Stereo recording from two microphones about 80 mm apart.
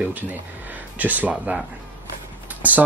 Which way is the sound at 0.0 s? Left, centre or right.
Right.